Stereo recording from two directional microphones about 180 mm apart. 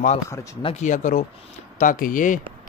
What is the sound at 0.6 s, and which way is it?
Speech, 40° left (ahead or behind).